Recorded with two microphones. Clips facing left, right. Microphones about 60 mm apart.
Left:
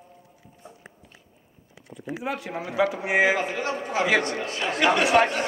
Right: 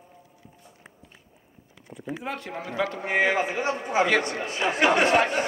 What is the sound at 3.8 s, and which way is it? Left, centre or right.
A man's voice, centre.